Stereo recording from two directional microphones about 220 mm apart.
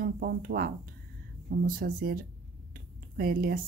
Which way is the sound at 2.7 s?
40° right (ahead or behind).